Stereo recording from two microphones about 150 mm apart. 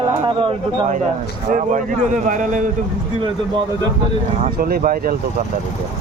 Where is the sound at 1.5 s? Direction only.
60° right (ahead or behind).